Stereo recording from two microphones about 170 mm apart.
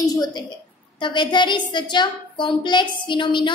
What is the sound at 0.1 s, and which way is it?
A woman's voice, 25° left (ahead or behind).